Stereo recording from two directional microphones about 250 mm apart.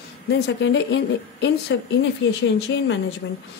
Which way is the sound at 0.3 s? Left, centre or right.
Left.